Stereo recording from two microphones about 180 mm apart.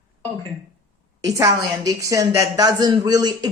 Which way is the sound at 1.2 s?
20° right (ahead or behind).